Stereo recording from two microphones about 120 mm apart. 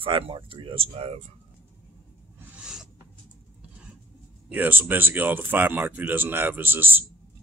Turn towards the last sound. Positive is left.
turn(degrees=-15)  # may be behind; listen again after turning